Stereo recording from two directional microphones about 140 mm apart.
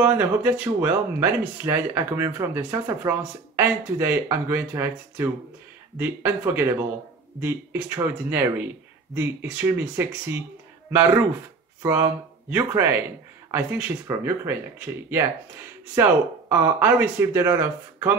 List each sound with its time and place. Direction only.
0.0 s speech: 15° right (ahead or behind)